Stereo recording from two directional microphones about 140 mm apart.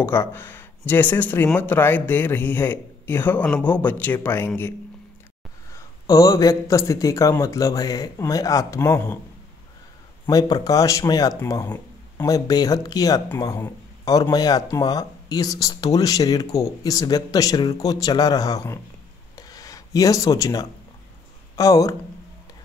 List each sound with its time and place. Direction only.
0.0 s speech: 15° left (ahead or behind)
10.2 s speech: 25° left (ahead or behind)
19.3 s a sound: 25° left (ahead or behind)
21.5 s speech: 25° left (ahead or behind)